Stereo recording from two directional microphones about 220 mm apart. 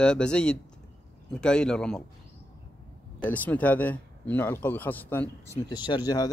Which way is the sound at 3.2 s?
5° left (ahead or behind).